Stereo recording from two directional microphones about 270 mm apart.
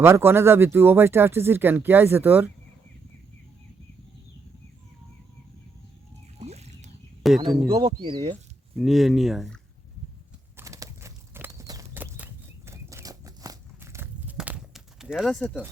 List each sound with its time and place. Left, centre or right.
0.0 s speech: centre
6.4 s a sound: right
7.2 s speech: centre
7.7 s speech: centre
8.8 s speech: centre
10.6 s horse: centre